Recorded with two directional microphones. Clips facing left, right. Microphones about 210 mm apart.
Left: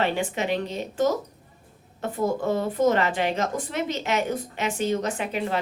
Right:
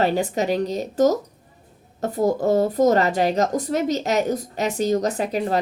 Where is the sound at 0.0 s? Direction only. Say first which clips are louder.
Right 5 dB; 40° right (ahead or behind).